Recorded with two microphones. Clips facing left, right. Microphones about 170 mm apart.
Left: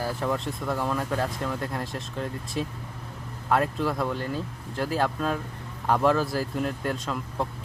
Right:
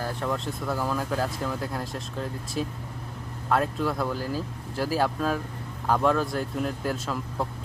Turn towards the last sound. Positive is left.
turn(degrees=0)  # may be behind; listen again after turning